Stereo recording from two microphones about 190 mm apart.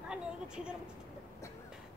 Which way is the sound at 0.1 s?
5° right (ahead or behind).